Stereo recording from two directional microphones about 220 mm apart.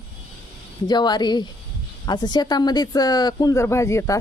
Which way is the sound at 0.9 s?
20° left (ahead or behind).